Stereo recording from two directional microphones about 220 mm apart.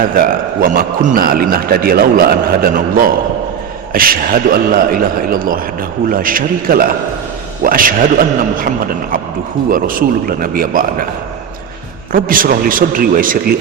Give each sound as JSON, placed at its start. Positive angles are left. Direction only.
{"t": 0.1, "sound": "a man's voice", "side_deg": -40}
{"t": 12.1, "sound": "a man's voice", "side_deg": -40}